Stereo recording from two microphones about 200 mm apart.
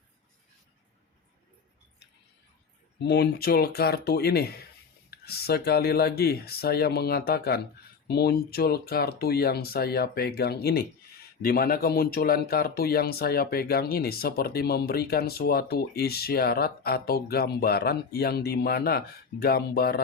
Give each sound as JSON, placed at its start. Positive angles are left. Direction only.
{"t": 3.0, "sound": "speech", "side_deg": 55}